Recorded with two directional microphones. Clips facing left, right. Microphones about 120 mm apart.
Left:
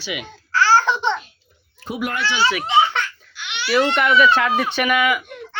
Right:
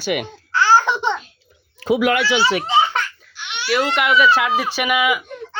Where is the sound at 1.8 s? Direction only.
90° right.